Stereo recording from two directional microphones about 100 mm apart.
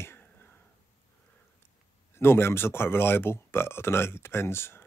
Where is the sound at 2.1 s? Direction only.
25° left (ahead or behind).